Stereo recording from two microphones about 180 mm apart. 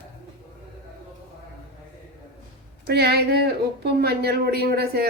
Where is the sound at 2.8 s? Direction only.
65° right (ahead or behind).